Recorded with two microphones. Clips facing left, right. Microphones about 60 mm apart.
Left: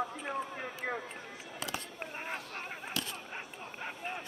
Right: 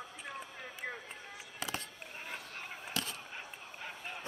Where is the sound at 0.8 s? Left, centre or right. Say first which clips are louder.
Left 5 dB; left.